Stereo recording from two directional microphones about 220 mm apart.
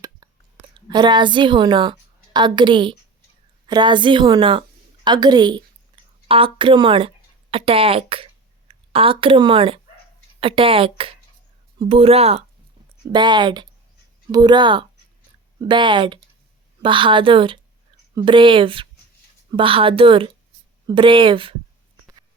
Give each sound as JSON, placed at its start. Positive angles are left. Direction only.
{"t": 0.9, "sound": "a woman's voice", "side_deg": -20}